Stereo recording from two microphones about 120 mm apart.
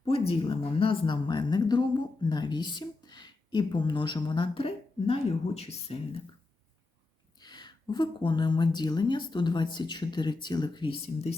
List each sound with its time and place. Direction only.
0.1 s a woman's voice: 50° left (ahead or behind)
7.3 s a woman's voice: 35° left (ahead or behind)
11.0 s speech: 60° left (ahead or behind)